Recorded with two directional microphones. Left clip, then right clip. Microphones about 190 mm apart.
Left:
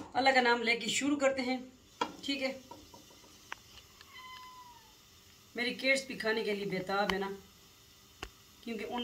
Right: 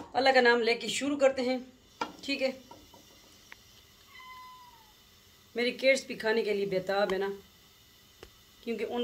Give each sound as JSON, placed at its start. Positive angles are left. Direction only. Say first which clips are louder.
{"t": 0.1, "sound": "speech", "louder": "right 4 dB", "side_deg": -50}
{"t": 5.6, "sound": "speech", "louder": "right 5 dB", "side_deg": -50}
{"t": 8.2, "sound": "a sound", "louder": "left 4 dB", "side_deg": -50}